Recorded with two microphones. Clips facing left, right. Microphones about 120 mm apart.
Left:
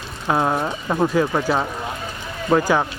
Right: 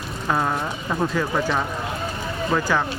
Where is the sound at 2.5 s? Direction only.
20° left (ahead or behind).